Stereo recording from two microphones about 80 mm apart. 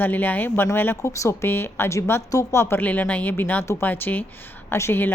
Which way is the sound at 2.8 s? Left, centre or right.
Centre.